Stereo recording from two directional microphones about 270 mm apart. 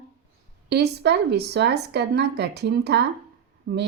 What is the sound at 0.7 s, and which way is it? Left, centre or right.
Speech, right.